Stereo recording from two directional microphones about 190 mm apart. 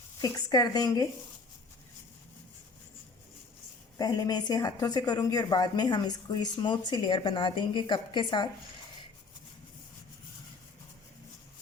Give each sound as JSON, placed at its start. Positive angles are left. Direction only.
{"t": 0.2, "sound": "speech", "side_deg": 20}
{"t": 3.9, "sound": "speech", "side_deg": 20}